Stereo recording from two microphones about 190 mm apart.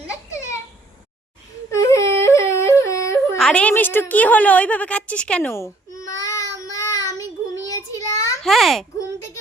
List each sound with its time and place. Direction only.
1.7 s yodeling: 15° left (ahead or behind)
3.3 s a woman's voice: 5° left (ahead or behind)
6.7 s child singing: 15° left (ahead or behind)
8.4 s a child's voice: centre (ahead or behind)